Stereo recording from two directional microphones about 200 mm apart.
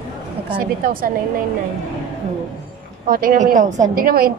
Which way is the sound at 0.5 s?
45° right (ahead or behind).